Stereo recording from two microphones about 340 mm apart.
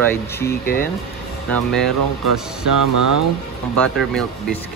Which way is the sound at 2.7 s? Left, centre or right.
Right.